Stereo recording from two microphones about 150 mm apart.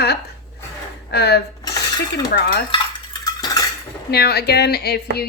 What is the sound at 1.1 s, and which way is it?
A woman's voice, 90° left.